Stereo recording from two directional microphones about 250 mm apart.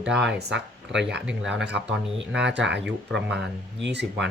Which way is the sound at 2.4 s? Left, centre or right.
Right.